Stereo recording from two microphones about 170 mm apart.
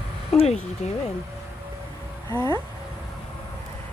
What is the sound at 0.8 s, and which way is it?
Speech, 40° left (ahead or behind).